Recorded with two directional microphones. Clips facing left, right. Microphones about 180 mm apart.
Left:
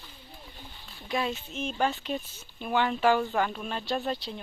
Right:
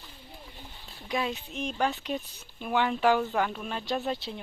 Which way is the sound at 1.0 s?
Centre (ahead or behind).